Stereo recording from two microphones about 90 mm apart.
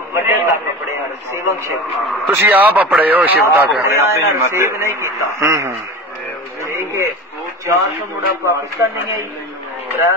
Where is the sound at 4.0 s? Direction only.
30° right (ahead or behind).